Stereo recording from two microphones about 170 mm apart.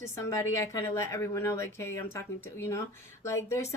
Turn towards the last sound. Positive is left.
turn(degrees=15)  # may be behind; listen again after turning